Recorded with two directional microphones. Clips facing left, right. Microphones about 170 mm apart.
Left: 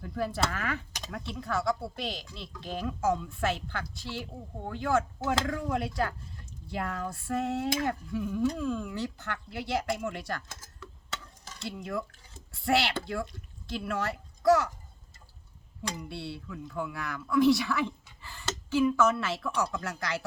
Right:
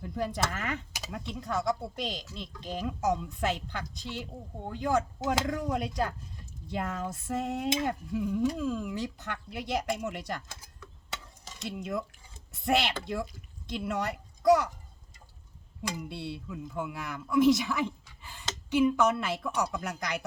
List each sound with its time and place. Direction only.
0.2 s speech: 20° right (ahead or behind)
16.0 s speech: 20° right (ahead or behind)